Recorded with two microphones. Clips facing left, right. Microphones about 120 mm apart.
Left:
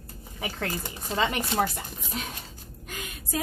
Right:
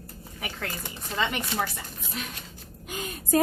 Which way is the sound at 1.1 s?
25° left (ahead or behind).